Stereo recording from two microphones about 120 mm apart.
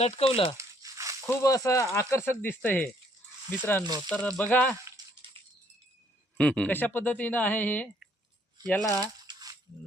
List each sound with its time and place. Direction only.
0.3 s speech: 50° left (ahead or behind)
0.5 s crumpling: 25° right (ahead or behind)
1.3 s speech: 25° left (ahead or behind)
6.3 s speech: 10° left (ahead or behind)
8.7 s speech: 25° left (ahead or behind)
9.0 s a sound: 30° right (ahead or behind)